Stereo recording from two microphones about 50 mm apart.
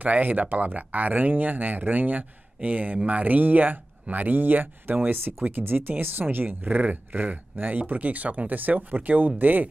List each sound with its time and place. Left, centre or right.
0.0 s speech: right